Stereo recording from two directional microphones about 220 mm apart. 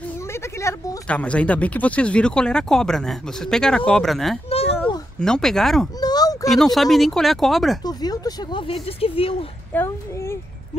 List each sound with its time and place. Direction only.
0.3 s speech: 10° left (ahead or behind)
4.5 s a sound: 25° left (ahead or behind)
5.2 s speech: centre (ahead or behind)
5.9 s a sound: 15° left (ahead or behind)
6.5 s speech: centre (ahead or behind)
7.8 s speech: 15° left (ahead or behind)
9.7 s a child's voice: 10° left (ahead or behind)